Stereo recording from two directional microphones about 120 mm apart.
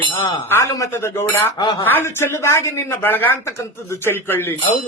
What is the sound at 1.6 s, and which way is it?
Speech, 45° left (ahead or behind).